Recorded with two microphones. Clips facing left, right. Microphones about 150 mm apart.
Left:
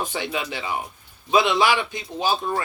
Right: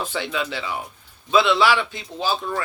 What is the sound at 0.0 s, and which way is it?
Speech, 15° left (ahead or behind).